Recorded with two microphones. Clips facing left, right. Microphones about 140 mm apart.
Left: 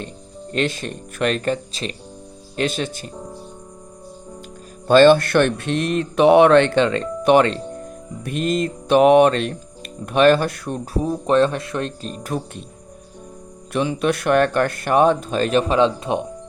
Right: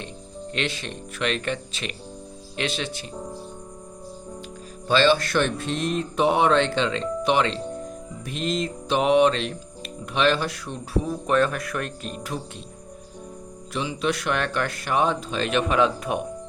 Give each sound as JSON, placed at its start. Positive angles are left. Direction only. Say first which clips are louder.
{"t": 0.5, "sound": "speech", "louder": "left 7 dB", "side_deg": 45}
{"t": 2.6, "sound": "speech", "louder": "left 6 dB", "side_deg": 45}
{"t": 4.9, "sound": "speech", "louder": "left 8 dB", "side_deg": 50}
{"t": 11.0, "sound": "speech", "louder": "left 6 dB", "side_deg": 30}
{"t": 12.3, "sound": "speech", "louder": "left 7 dB", "side_deg": 50}
{"t": 13.7, "sound": "speech", "louder": "left 6 dB", "side_deg": 55}